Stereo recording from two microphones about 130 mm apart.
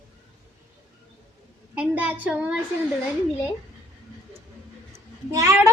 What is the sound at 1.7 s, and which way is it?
Child singing, 10° right (ahead or behind).